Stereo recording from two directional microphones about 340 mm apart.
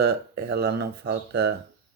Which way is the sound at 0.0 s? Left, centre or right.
Right.